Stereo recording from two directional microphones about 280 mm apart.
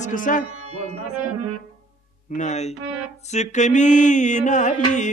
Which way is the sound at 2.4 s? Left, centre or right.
Left.